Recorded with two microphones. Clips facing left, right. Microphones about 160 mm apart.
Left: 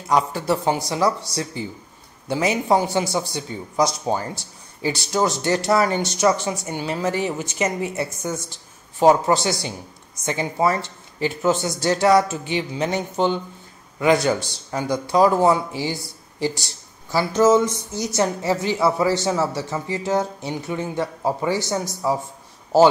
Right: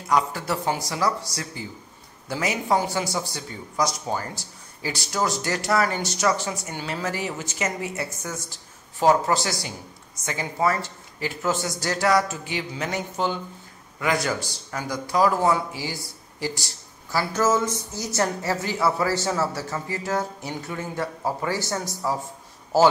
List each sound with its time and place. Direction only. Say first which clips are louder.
0.1 s a woman's voice: left 3 dB; 25° left (ahead or behind)